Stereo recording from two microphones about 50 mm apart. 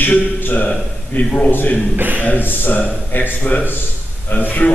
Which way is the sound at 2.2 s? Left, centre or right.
Left.